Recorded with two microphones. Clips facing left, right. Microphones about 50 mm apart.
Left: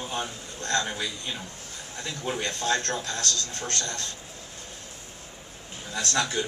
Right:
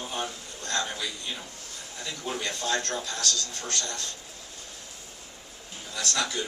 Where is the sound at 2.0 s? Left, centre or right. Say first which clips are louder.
Left 2 dB; left.